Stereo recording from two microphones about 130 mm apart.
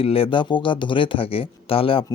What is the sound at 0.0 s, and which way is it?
Speech, 45° left (ahead or behind).